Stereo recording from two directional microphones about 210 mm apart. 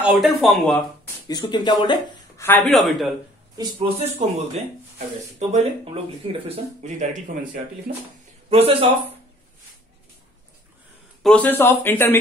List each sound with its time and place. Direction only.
0.0 s speech: centre (ahead or behind)
1.2 s speech: 20° left (ahead or behind)
2.4 s speech: 5° left (ahead or behind)
3.5 s speech: 30° right (ahead or behind)
7.9 s speech: 40° right (ahead or behind)
8.5 s speech: 30° right (ahead or behind)
11.2 s speech: 10° left (ahead or behind)